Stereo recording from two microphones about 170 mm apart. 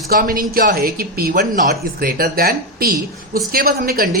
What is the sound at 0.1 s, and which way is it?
Speech, 55° right (ahead or behind).